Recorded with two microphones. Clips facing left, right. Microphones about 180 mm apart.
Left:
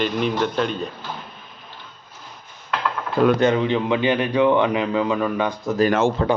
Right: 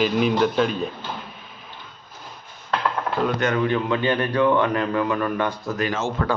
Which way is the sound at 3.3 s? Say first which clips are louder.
Left 3 dB; 25° left (ahead or behind).